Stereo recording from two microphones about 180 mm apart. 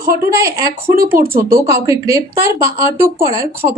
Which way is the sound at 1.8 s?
20° right (ahead or behind).